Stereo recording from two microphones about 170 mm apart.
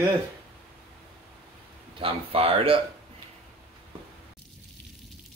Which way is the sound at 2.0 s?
35° right (ahead or behind).